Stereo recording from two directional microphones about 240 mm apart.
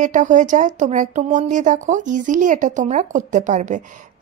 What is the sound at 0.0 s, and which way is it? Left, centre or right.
Speech, right.